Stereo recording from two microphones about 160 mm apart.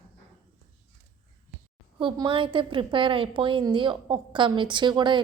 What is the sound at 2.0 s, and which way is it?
A woman's voice, 30° right (ahead or behind).